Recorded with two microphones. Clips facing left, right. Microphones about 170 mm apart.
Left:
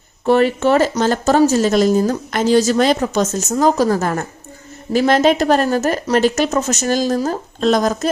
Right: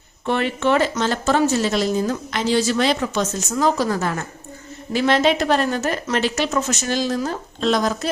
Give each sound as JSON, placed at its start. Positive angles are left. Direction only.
{"t": 0.3, "sound": "speech", "side_deg": 40}